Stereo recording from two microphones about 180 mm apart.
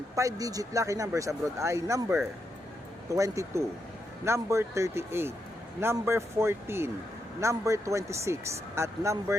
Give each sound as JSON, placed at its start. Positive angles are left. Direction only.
{"t": 0.2, "sound": "speech", "side_deg": -20}